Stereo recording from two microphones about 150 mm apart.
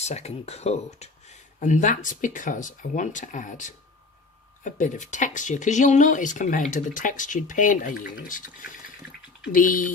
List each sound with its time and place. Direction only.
0.0 s speech: 45° left (ahead or behind)
1.5 s speech: 55° left (ahead or behind)